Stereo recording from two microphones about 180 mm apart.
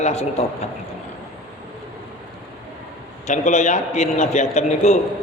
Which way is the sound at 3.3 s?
40° left (ahead or behind).